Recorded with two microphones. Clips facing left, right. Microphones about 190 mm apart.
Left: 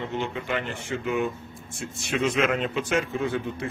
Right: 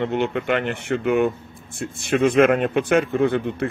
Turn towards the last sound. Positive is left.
turn(degrees=-60)  # may be behind; listen again after turning